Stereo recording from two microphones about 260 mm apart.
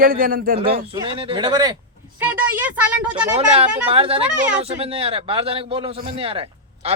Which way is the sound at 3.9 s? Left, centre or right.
Right.